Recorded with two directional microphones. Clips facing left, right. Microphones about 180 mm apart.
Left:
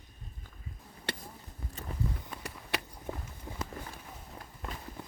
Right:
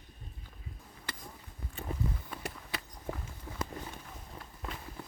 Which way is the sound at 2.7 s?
80° left.